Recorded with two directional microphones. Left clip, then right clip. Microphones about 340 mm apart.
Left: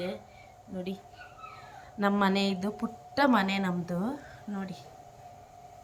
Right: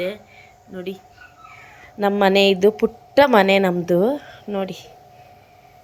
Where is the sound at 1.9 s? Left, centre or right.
Centre.